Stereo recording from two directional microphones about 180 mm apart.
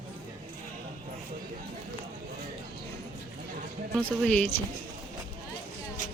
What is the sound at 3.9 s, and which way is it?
Speech, 5° left (ahead or behind).